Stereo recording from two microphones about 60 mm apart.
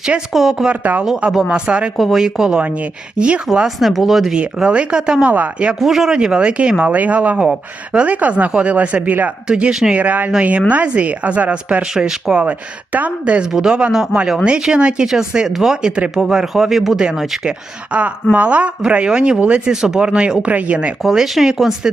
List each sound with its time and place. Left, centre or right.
0.3 s speech: centre
0.7 s speech: right
1.3 s speech: centre
1.5 s speech: centre
2.0 s speech: centre
2.2 s speech: centre
3.5 s speech: centre
4.4 s speech: centre
5.8 s speech: centre; by 11.9 s right
11.9 s speech: centre
17.9 s speech: right
21.0 s speech: centre